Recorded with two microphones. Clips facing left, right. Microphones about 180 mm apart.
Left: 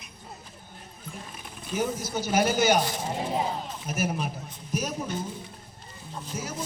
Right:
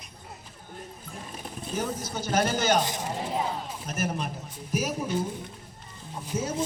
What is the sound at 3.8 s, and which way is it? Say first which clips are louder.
Speech: left 2 dB; 5° left (ahead or behind).